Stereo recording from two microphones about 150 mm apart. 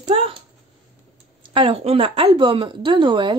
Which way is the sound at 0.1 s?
35° right (ahead or behind).